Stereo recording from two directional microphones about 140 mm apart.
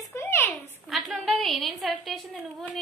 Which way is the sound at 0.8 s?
Centre (ahead or behind).